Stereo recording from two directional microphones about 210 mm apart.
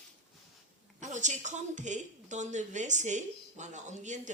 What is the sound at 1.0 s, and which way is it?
A woman's voice, 35° right (ahead or behind).